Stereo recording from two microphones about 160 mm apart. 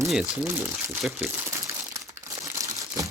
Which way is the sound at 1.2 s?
20° right (ahead or behind).